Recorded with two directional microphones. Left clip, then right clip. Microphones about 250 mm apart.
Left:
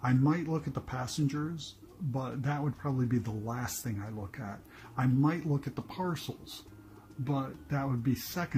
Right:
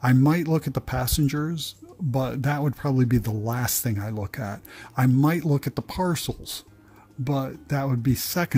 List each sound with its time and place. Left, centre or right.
0.0 s speech: right